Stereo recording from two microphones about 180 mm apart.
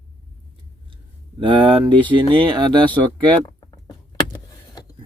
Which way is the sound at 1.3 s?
30° right (ahead or behind).